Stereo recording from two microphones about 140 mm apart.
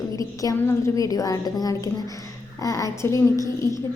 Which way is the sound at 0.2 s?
25° left (ahead or behind).